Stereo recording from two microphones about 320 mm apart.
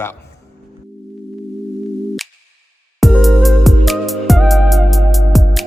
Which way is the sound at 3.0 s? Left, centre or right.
Centre.